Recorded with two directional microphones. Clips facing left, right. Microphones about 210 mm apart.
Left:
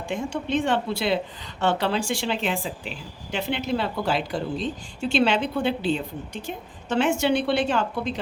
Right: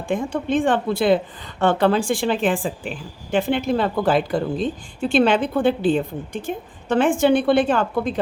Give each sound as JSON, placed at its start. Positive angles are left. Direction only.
{"t": 0.1, "sound": "a woman's voice", "side_deg": -50}